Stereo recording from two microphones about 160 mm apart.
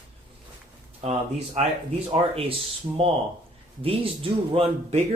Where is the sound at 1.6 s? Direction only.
40° right (ahead or behind).